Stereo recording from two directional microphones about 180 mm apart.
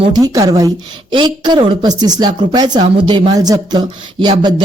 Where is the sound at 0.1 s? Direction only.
20° right (ahead or behind).